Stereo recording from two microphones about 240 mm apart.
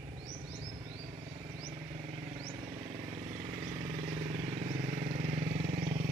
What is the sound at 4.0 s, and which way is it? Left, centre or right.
Vehicle, right.